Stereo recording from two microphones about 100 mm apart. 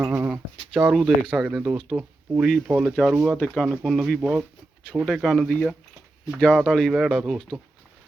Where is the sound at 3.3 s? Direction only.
10° left (ahead or behind).